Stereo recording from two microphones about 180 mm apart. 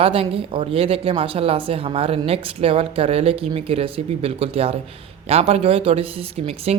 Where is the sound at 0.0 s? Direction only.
30° right (ahead or behind).